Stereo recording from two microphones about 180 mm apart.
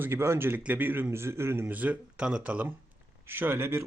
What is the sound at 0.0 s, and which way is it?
Speech, 15° right (ahead or behind).